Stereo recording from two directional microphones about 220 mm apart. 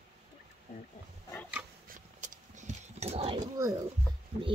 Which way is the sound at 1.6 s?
10° right (ahead or behind).